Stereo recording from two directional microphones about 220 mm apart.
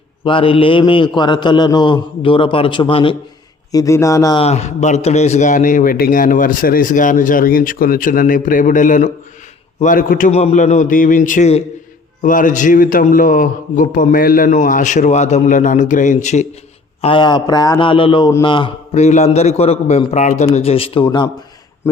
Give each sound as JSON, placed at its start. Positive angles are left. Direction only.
{"t": 0.3, "sound": "a man's voice", "side_deg": 25}
{"t": 4.4, "sound": "a man's voice", "side_deg": 30}